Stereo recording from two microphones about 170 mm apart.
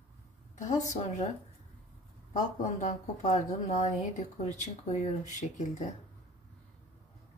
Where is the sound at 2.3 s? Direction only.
45° left (ahead or behind).